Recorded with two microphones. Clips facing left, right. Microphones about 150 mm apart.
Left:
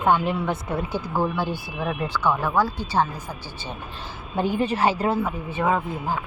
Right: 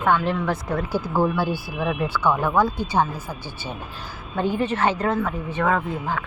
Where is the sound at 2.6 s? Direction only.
10° left (ahead or behind).